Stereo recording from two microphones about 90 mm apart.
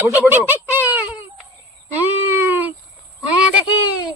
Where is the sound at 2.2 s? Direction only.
25° right (ahead or behind).